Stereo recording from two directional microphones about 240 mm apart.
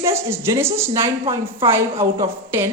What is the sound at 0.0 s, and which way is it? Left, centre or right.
A woman's voice, centre.